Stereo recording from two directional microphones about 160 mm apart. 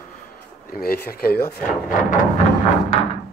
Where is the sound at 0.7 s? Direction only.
70° left (ahead or behind).